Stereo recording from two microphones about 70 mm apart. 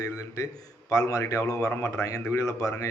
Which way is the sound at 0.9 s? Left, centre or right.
Left.